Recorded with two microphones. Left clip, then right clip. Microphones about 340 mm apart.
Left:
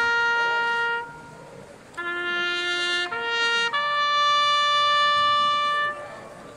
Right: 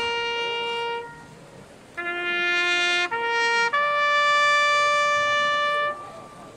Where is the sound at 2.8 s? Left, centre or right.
Centre.